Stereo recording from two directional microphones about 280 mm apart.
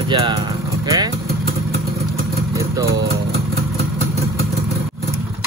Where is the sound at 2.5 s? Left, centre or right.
Centre.